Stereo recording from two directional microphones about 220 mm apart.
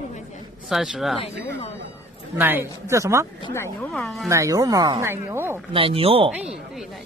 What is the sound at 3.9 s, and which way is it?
Speech, centre (ahead or behind).